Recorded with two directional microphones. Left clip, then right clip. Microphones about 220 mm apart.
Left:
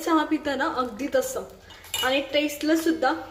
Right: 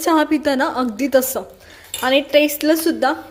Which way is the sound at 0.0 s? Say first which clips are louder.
Right 7 dB; 35° right (ahead or behind).